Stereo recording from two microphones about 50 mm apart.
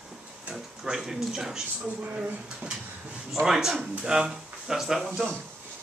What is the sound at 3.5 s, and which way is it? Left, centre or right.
Speech, centre.